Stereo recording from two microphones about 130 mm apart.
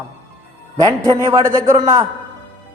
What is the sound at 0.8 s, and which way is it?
Speech, 30° right (ahead or behind).